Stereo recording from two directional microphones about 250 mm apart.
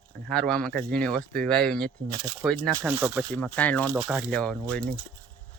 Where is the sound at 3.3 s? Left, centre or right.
Centre.